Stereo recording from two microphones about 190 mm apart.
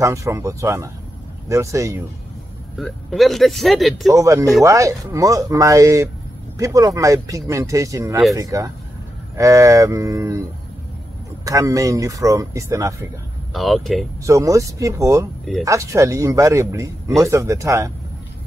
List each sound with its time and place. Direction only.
0.0 s speech: 15° right (ahead or behind)
2.8 s speech: centre (ahead or behind)
4.1 s speech: 15° right (ahead or behind)
11.4 s speech: 15° right (ahead or behind)
13.5 s speech: centre (ahead or behind)
14.2 s speech: 15° right (ahead or behind)